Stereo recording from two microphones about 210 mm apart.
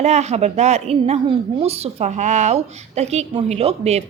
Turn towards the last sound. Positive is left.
turn(degrees=-30)  # may be behind; listen again after turning